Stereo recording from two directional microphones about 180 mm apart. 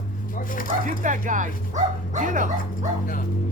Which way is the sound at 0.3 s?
50° left (ahead or behind).